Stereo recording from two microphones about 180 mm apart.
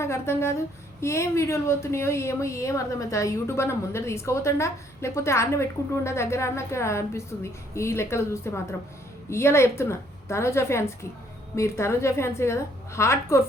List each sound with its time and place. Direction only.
0.0 s a woman's voice: 15° left (ahead or behind)